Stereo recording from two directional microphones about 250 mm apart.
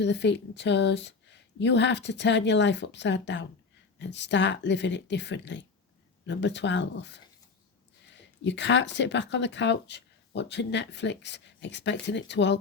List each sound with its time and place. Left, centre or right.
0.0 s speech: left